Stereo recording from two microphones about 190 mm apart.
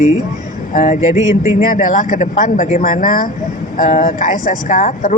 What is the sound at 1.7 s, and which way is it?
Speech, 45° left (ahead or behind).